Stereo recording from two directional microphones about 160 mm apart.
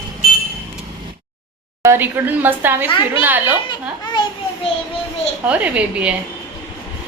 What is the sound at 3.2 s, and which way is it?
Speech, 10° right (ahead or behind).